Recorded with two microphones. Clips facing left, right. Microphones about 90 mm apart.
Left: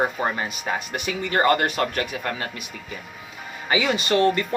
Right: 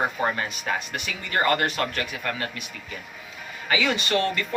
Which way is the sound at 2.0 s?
30° left (ahead or behind).